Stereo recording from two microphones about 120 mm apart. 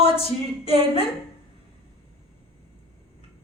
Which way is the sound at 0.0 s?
55° left (ahead or behind).